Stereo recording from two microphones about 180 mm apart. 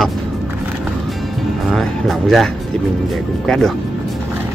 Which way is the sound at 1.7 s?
Centre (ahead or behind).